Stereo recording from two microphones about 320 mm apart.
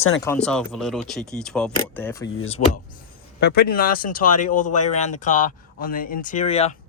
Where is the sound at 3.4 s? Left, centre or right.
Left.